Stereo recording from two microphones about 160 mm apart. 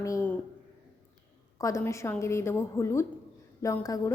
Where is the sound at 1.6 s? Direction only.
20° left (ahead or behind).